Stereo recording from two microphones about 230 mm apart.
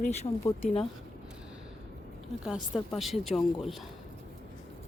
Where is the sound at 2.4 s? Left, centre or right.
Centre.